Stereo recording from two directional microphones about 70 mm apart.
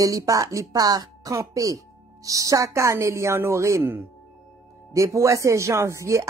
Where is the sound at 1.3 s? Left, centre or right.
Right.